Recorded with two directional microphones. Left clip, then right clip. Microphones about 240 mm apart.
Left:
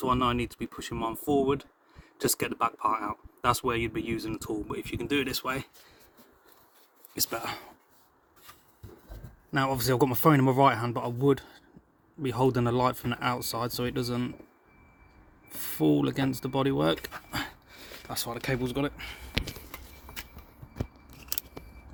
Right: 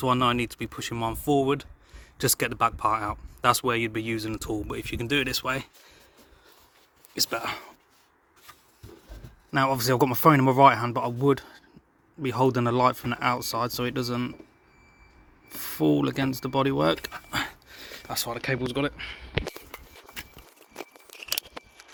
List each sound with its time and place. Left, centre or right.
0.0 s speech: centre
7.2 s speech: centre
9.5 s speech: centre
15.4 s speech: centre